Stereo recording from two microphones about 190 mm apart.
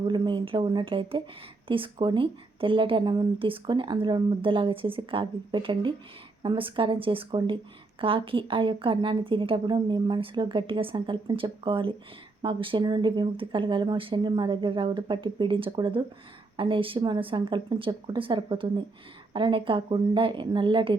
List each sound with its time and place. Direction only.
0.1 s speech: 25° right (ahead or behind)